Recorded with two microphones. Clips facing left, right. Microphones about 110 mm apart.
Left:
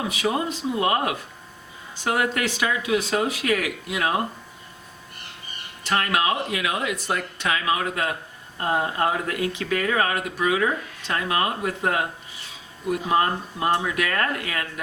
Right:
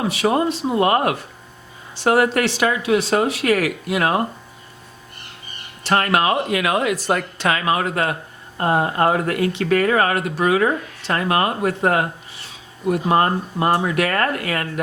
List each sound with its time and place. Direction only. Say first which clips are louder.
0.1 s speech: right 6 dB; 70° right (ahead or behind)
0.7 s speech: right 4 dB; 55° right (ahead or behind)
5.8 s speech: right 5 dB; 55° right (ahead or behind)